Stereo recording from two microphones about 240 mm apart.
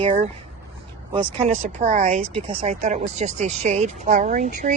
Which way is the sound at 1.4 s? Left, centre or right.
Right.